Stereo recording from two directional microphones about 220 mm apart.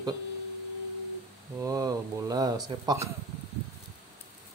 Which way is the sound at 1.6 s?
15° right (ahead or behind).